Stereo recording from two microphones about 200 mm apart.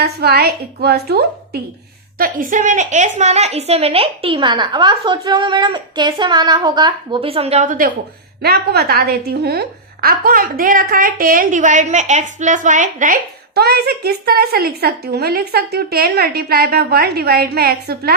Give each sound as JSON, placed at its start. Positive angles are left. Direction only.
{"t": 0.0, "sound": "a woman's voice", "side_deg": -50}
{"t": 8.4, "sound": "a woman's voice", "side_deg": -50}
{"t": 13.5, "sound": "a woman's voice", "side_deg": -55}